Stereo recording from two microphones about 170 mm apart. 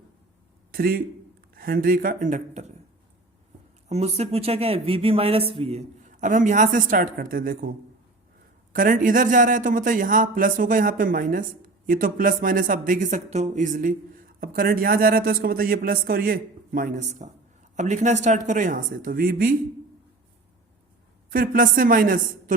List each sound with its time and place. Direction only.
0.7 s a woman's voice: 60° right (ahead or behind); by 2.7 s 45° right (ahead or behind)
3.8 s speech: 40° right (ahead or behind); by 7.7 s 55° right (ahead or behind)
8.7 s speech: 55° right (ahead or behind)
21.2 s a woman's voice: 60° right (ahead or behind)